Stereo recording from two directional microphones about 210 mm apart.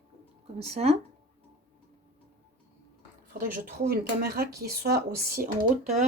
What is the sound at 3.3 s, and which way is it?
Speech, 45° right (ahead or behind).